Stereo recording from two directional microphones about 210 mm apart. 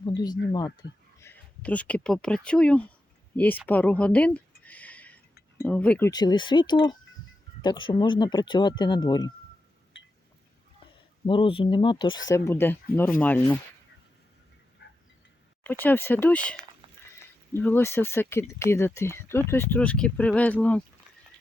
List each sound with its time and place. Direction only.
0.0 s a sound: 20° left (ahead or behind)
0.5 s speech: 20° left (ahead or behind)
3.7 s a sound: 5° left (ahead or behind)
5.5 s speech: 5° left (ahead or behind)
6.1 s speech: 20° left (ahead or behind)
11.3 s speech: 25° left (ahead or behind); by 13.6 s 10° left (ahead or behind)
15.8 s speech: 10° left (ahead or behind)